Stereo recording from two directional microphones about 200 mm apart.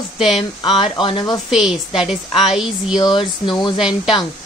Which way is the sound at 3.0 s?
20° left (ahead or behind).